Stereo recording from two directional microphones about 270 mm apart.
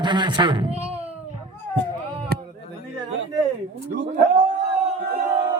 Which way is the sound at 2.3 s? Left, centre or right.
Right.